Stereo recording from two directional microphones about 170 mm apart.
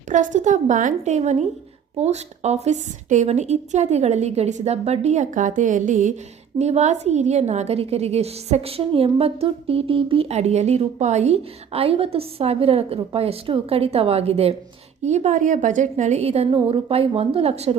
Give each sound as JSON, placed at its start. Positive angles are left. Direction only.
{"t": 0.1, "sound": "a woman's voice", "side_deg": -50}